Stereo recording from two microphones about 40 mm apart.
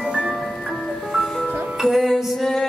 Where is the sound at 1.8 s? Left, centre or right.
Centre.